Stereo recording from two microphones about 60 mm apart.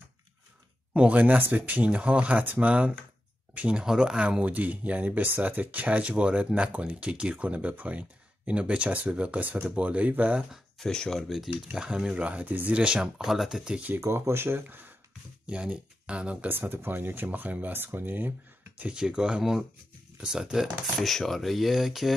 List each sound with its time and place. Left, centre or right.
0.9 s speech: right
10.8 s speech: centre
11.1 s speech: centre
12.2 s speech: right
13.9 s speech: right
15.4 s speech: centre
16.4 s speech: right
18.8 s speech: centre
21.0 s speech: centre